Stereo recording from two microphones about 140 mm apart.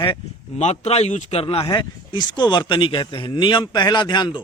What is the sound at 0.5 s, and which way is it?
A man's voice, 55° left (ahead or behind).